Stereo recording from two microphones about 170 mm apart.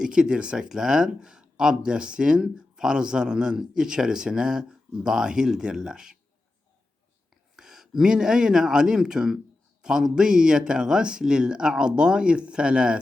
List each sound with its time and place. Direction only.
0.0 s speech: 5° right (ahead or behind)
7.5 s speech: 5° right (ahead or behind)